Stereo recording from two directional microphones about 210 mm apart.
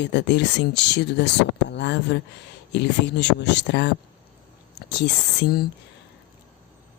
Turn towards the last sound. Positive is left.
turn(degrees=50)  # may be behind; listen again after turning